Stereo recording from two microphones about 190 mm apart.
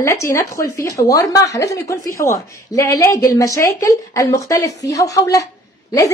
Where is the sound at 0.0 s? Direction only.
15° left (ahead or behind).